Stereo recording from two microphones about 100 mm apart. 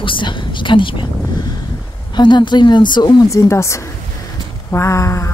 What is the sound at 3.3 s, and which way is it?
Speech, 30° left (ahead or behind).